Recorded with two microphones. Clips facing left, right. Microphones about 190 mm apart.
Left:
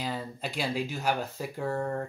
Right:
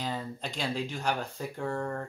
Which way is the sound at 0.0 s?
5° left (ahead or behind).